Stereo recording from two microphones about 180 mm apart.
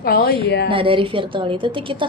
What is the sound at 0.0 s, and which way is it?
Speech, 55° left (ahead or behind).